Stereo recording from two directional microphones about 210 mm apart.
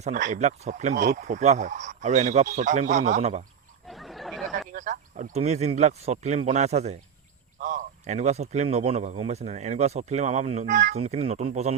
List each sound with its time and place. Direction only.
0.0 s speech: 35° right (ahead or behind)
3.8 s a sound: centre (ahead or behind)
4.7 s speech: 35° right (ahead or behind)